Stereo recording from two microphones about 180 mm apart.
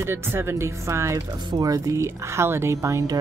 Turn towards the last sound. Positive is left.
turn(degrees=-20)  # may be behind; listen again after turning